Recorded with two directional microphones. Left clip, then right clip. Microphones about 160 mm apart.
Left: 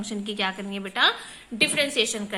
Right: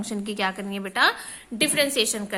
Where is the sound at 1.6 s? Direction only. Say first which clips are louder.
Even; 40° right (ahead or behind).